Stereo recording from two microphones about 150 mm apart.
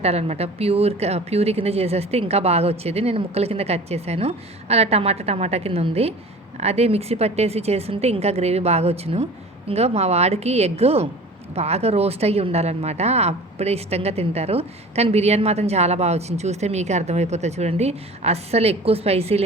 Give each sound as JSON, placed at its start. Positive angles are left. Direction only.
{"t": 0.0, "sound": "a woman's voice", "side_deg": -45}